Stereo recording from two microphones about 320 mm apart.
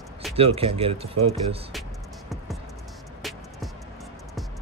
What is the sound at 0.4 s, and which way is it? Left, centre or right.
Speech, centre.